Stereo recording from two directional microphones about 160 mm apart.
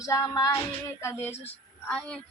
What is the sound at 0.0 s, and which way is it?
Female singing, 20° left (ahead or behind).